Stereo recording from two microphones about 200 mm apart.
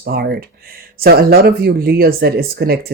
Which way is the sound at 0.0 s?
50° right (ahead or behind).